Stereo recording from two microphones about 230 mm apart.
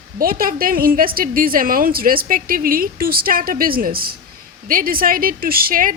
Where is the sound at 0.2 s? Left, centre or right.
Right.